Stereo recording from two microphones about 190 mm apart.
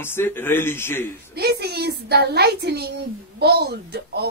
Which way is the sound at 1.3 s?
60° right (ahead or behind).